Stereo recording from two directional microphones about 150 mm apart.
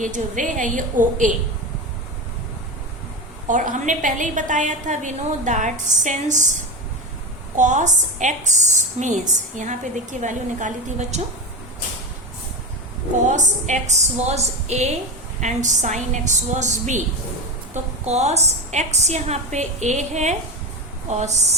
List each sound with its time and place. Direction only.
0.0 s a woman's voice: 60° right (ahead or behind)
3.4 s a woman's voice: 60° right (ahead or behind)
7.5 s a woman's voice: 55° right (ahead or behind)
13.2 s a woman's voice: 55° right (ahead or behind)
18.0 s a woman's voice: 45° right (ahead or behind)